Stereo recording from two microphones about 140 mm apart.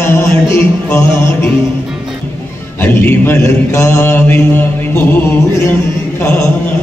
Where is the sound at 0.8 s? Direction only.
15° left (ahead or behind).